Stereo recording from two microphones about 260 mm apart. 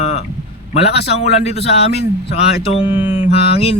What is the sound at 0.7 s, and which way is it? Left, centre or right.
Speech, left.